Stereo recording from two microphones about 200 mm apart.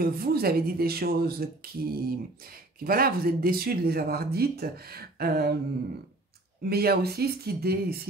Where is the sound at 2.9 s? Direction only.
45° right (ahead or behind).